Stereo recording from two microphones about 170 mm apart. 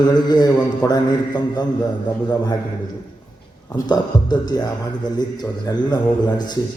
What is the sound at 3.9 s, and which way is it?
A man's voice, 25° left (ahead or behind).